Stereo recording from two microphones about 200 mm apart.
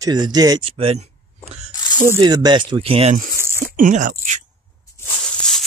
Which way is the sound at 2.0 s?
15° right (ahead or behind).